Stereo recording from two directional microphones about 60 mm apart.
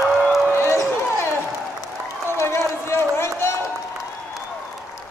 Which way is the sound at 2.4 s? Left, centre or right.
Left.